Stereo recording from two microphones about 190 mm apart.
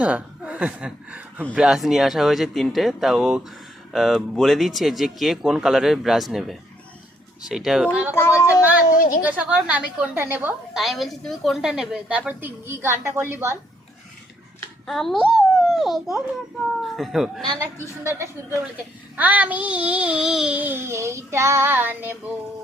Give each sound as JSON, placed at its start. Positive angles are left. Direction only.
{"t": 0.0, "sound": "a woman's voice", "side_deg": -5}
{"t": 8.1, "sound": "a sound", "side_deg": 10}
{"t": 9.0, "sound": "a sound", "side_deg": 50}
{"t": 9.2, "sound": "child singing", "side_deg": -10}
{"t": 10.8, "sound": "a woman's voice", "side_deg": 0}
{"t": 14.8, "sound": "a child's voice", "side_deg": 0}
{"t": 18.0, "sound": "child singing", "side_deg": -15}